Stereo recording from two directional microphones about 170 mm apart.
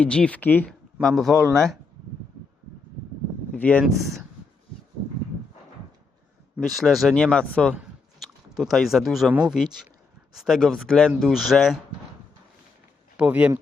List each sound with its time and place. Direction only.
0.0 s speech: 5° left (ahead or behind)
3.5 s speech: 10° left (ahead or behind)
6.6 s speech: centre (ahead or behind)
13.1 s speech: 10° right (ahead or behind)